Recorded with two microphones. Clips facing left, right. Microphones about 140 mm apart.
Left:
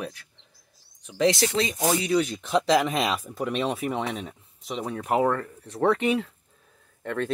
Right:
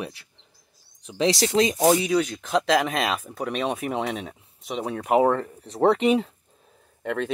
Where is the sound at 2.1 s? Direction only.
Centre (ahead or behind).